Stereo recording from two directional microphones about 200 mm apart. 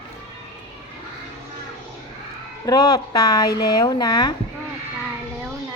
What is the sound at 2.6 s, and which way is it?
Speech, 20° left (ahead or behind).